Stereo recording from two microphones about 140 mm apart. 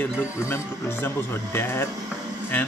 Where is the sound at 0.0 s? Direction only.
20° left (ahead or behind).